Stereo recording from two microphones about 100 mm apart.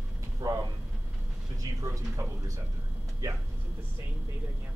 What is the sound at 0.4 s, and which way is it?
Speech, 35° right (ahead or behind).